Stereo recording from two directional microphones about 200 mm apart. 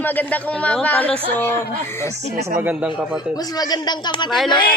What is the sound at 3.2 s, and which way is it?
Speech, 20° left (ahead or behind).